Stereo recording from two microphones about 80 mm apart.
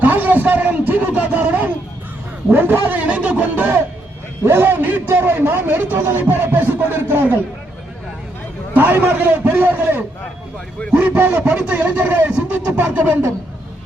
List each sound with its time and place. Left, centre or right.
0.0 s a sound: right
2.5 s a man's voice: right
8.7 s a man's voice: centre